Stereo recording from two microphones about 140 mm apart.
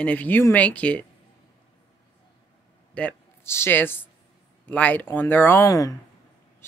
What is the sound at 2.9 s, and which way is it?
Speech, 15° left (ahead or behind).